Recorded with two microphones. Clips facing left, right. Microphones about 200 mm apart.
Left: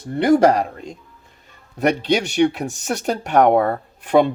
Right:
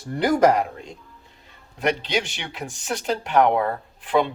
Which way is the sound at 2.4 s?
45° left (ahead or behind).